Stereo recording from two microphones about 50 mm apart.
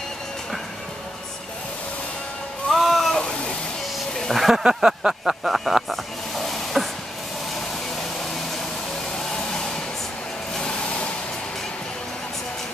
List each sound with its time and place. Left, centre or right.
2.7 s a sound: centre
3.2 s vehicle: centre
4.2 s speech: centre
4.6 s snake: centre
9.3 s hair dryer: centre
10.5 s vehicle: centre